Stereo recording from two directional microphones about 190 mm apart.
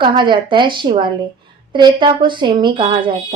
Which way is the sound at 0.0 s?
25° right (ahead or behind).